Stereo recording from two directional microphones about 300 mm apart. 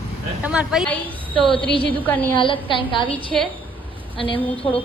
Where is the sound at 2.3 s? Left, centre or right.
Centre.